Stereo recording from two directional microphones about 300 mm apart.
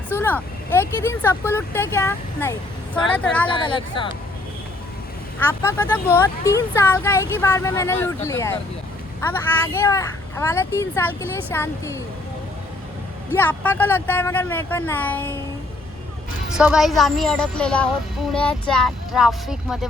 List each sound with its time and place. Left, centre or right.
0.2 s speech: centre
3.4 s speech: centre
5.4 s speech: centre
9.7 s speech: centre
13.3 s speech: centre
16.5 s a woman's voice: centre